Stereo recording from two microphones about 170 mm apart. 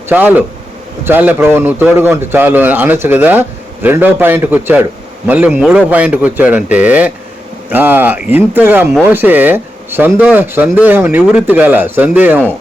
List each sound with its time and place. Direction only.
0.1 s a man's voice: 10° right (ahead or behind)